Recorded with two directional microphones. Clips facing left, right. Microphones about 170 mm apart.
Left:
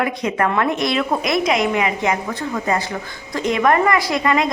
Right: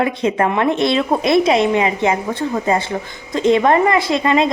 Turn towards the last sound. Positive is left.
turn(degrees=-25)  # may be behind; listen again after turning